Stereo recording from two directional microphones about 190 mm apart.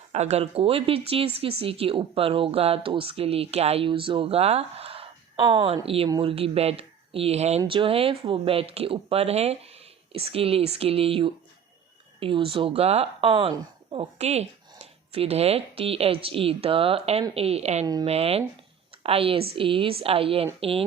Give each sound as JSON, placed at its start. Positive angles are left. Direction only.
{"t": 0.1, "sound": "speech", "side_deg": -35}